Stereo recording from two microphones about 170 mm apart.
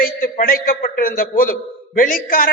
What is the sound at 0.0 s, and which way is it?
A man's voice, 55° left (ahead or behind).